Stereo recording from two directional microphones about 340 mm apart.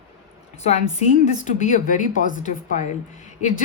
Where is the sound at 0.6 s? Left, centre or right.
Centre.